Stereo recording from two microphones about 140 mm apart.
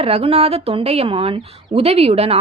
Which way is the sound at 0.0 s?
45° right (ahead or behind).